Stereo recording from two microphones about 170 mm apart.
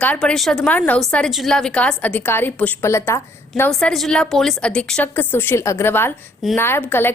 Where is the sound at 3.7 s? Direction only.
5° left (ahead or behind).